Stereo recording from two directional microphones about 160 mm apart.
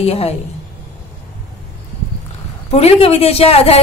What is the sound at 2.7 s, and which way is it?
Speech, 40° left (ahead or behind).